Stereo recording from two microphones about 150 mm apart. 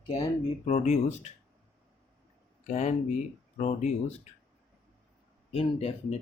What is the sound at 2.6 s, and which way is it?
Speech, 50° left (ahead or behind).